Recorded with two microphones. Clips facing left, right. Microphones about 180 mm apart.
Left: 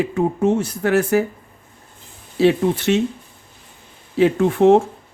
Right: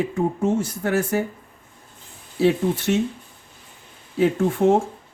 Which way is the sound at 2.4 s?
75° left (ahead or behind).